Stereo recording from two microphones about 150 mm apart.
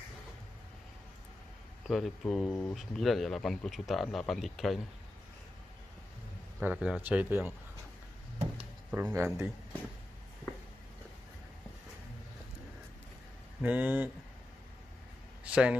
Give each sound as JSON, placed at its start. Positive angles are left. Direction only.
{"t": 1.9, "sound": "speech", "side_deg": 0}
{"t": 6.6, "sound": "speech", "side_deg": -10}
{"t": 8.9, "sound": "speech", "side_deg": -15}
{"t": 13.6, "sound": "speech", "side_deg": -10}
{"t": 15.4, "sound": "a man's voice", "side_deg": -10}